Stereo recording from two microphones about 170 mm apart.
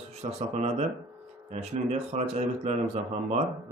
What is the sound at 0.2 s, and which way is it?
Speech, 40° right (ahead or behind).